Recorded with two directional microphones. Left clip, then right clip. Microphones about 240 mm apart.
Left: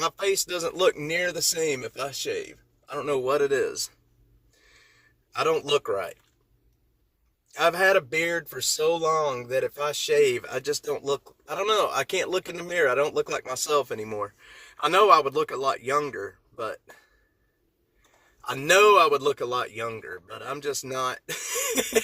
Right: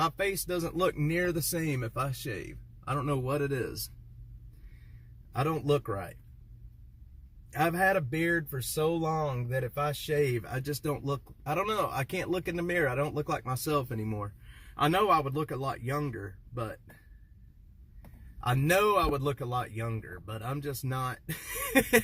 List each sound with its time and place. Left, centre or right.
0.0 s speech: centre
5.3 s speech: centre
7.5 s speech: centre
18.5 s speech: centre